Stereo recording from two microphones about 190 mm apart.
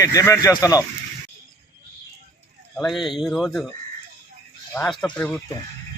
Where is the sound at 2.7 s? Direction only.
Centre (ahead or behind).